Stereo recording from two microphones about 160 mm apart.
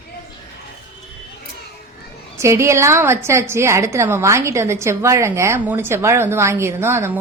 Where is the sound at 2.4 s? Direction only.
15° right (ahead or behind).